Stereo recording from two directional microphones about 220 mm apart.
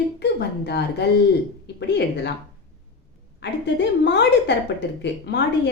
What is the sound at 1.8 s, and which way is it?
Speech, 50° left (ahead or behind).